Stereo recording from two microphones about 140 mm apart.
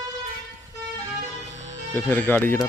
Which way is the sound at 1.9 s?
15° left (ahead or behind).